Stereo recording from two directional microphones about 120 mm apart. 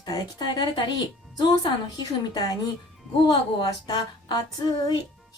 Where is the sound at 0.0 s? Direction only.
35° left (ahead or behind).